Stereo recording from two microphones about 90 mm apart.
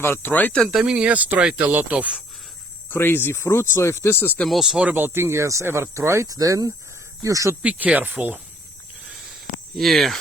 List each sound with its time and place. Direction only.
0.0 s speech: 25° left (ahead or behind)
0.5 s speech: centre (ahead or behind); by 2.2 s 15° right (ahead or behind)
2.9 s speech: 25° left (ahead or behind)
4.4 s speech: centre (ahead or behind)
4.9 s speech: 20° right (ahead or behind); by 7.5 s 40° right (ahead or behind)
7.6 s speech: 15° right (ahead or behind)
9.7 s speech: centre (ahead or behind)